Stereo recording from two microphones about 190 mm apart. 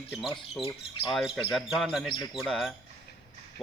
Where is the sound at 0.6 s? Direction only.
30° left (ahead or behind).